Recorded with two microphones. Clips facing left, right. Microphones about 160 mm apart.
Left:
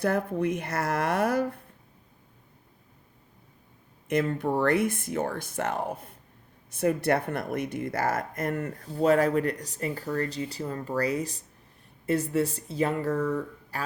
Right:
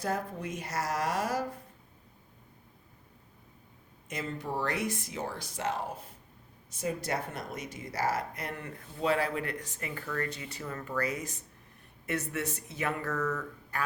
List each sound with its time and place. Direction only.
0.0 s speech: 60° left (ahead or behind)
4.1 s speech: 60° left (ahead or behind); by 13.8 s 30° left (ahead or behind)